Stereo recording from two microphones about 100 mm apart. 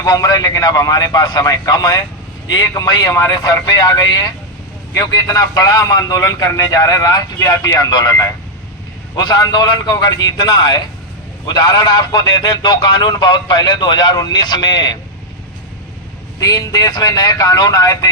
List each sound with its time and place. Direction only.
0.0 s a man's voice: 40° left (ahead or behind)
16.4 s a man's voice: 35° left (ahead or behind)